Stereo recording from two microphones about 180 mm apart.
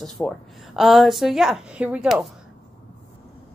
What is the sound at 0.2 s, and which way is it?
A woman's voice, 5° left (ahead or behind).